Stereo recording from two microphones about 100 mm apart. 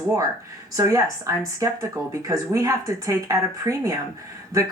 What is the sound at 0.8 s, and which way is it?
Speech, 35° right (ahead or behind).